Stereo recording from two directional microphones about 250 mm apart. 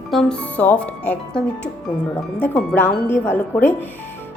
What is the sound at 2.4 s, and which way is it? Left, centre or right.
Speech, centre.